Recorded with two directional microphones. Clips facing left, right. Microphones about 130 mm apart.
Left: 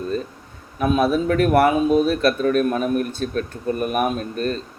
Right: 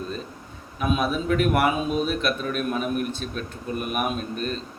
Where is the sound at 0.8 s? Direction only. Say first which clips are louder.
Left 6 dB; 40° left (ahead or behind).